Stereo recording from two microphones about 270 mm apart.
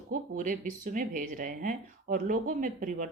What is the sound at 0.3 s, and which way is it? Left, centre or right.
Speech, right.